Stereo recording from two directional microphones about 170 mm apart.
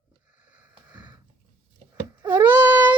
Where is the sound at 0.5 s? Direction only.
10° right (ahead or behind).